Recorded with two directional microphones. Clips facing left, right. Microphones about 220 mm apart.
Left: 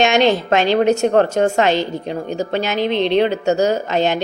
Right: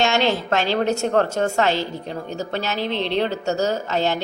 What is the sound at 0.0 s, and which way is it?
A woman's voice, 15° left (ahead or behind).